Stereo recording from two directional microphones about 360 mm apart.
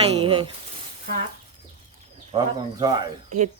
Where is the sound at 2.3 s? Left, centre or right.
Centre.